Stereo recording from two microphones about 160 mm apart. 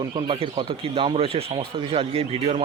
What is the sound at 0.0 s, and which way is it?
Speech, 30° right (ahead or behind).